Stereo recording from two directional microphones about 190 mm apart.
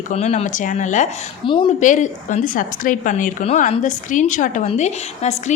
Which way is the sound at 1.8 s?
40° left (ahead or behind).